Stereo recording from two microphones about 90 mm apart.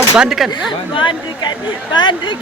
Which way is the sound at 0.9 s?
65° left (ahead or behind).